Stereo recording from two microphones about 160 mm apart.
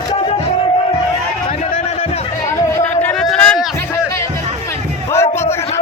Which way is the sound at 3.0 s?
5° left (ahead or behind).